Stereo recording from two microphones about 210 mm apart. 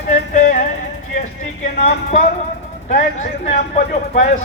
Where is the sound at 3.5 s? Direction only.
35° left (ahead or behind).